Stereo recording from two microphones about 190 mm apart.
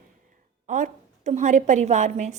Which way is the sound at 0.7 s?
40° right (ahead or behind).